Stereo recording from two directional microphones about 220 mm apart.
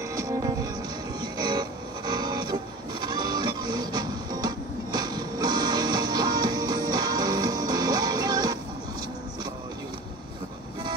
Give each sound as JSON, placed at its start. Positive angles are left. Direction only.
{"t": 0.1, "sound": "music", "side_deg": -15}